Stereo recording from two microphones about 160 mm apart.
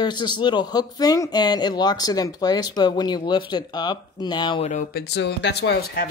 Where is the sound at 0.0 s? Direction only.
25° left (ahead or behind).